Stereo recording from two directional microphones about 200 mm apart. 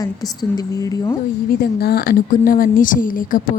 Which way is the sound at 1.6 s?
50° left (ahead or behind).